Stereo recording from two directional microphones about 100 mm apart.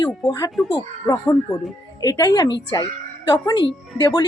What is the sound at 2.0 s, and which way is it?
A woman's voice, 40° left (ahead or behind).